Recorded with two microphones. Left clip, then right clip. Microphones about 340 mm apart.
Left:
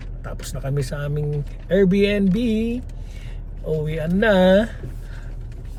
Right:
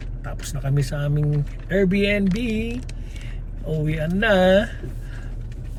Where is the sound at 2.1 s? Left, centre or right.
Left.